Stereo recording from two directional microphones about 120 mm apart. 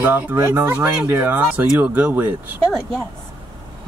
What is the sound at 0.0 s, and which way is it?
Speech, 15° right (ahead or behind).